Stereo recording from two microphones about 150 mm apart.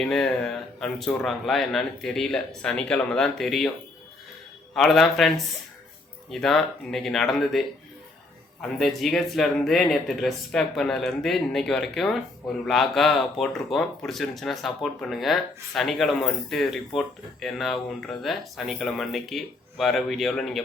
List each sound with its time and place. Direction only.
0.0 s speech: 5° left (ahead or behind)
4.7 s speech: centre (ahead or behind)
8.8 s speech: centre (ahead or behind)